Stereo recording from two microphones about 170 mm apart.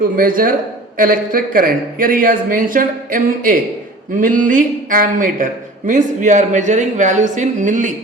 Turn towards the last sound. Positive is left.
turn(degrees=-50)  # may be behind; listen again after turning